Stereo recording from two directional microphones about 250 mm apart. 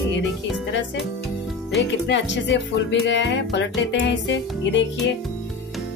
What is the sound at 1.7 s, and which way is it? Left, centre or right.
Speech, left.